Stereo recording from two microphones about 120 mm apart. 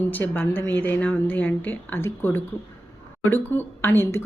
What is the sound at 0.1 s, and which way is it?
Speech, 15° left (ahead or behind).